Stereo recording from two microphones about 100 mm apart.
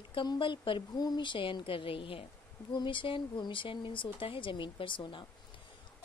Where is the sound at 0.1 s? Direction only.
55° left (ahead or behind).